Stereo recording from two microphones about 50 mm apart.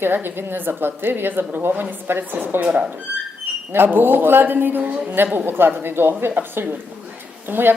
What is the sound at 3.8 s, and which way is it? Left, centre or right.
A woman's voice, right.